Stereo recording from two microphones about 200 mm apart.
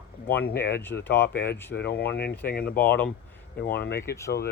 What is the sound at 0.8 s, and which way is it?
Speech, 10° left (ahead or behind).